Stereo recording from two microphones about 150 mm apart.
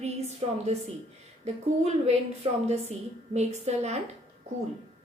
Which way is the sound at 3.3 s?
45° right (ahead or behind).